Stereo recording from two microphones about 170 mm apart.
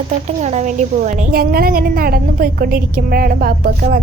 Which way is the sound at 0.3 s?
45° right (ahead or behind).